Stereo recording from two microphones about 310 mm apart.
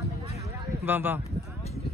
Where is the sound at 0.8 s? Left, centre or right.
Centre.